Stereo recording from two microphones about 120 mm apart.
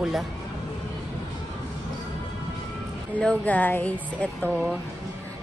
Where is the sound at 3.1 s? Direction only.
10° left (ahead or behind).